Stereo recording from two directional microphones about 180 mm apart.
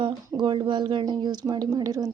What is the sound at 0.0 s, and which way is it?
A woman's voice, 25° right (ahead or behind).